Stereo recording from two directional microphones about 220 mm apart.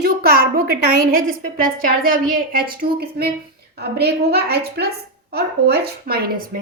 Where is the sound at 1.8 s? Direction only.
40° right (ahead or behind).